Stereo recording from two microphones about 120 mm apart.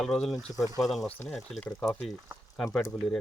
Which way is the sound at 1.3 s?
5° left (ahead or behind).